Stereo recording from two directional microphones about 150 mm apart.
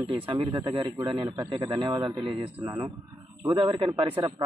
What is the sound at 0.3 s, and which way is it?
Speech, 35° right (ahead or behind).